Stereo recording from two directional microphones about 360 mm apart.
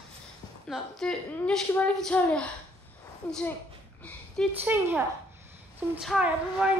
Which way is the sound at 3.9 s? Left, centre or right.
Centre.